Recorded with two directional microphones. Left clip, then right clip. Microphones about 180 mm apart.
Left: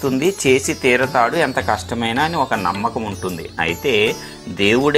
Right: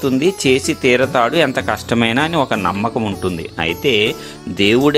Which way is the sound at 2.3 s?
65° right (ahead or behind).